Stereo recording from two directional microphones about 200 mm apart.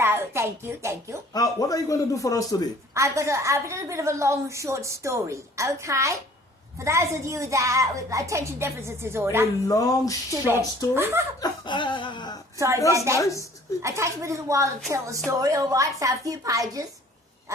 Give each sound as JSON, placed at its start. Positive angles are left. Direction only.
{"t": 0.0, "sound": "a woman's voice", "side_deg": -10}
{"t": 1.3, "sound": "a man's voice", "side_deg": 15}
{"t": 2.9, "sound": "a woman's voice", "side_deg": -15}
{"t": 9.6, "sound": "a man's voice", "side_deg": 15}
{"t": 10.9, "sound": "a woman's voice", "side_deg": -10}
{"t": 11.3, "sound": "chuckle", "side_deg": 25}
{"t": 12.5, "sound": "a woman's voice", "side_deg": -15}
{"t": 13.1, "sound": "a man's voice", "side_deg": 15}
{"t": 13.8, "sound": "a woman's voice", "side_deg": -15}